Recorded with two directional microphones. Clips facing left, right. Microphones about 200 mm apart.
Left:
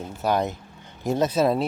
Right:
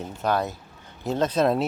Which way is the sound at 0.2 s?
15° left (ahead or behind).